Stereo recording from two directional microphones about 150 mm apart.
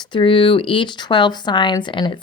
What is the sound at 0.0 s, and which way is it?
Speech, 35° left (ahead or behind).